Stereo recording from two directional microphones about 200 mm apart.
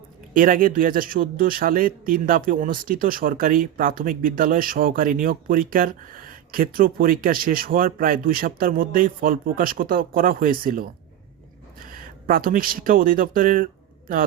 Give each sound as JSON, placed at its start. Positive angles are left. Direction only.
{"t": 0.3, "sound": "speech", "side_deg": -45}
{"t": 11.9, "sound": "speech", "side_deg": -45}